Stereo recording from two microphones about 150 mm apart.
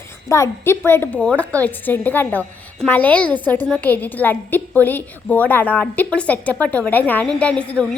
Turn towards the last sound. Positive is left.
turn(degrees=10)  # may be behind; listen again after turning